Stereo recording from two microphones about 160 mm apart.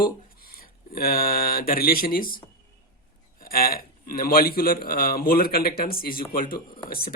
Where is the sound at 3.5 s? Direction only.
65° left (ahead or behind).